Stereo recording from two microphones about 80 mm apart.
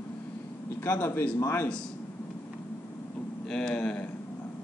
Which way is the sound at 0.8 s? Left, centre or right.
Left.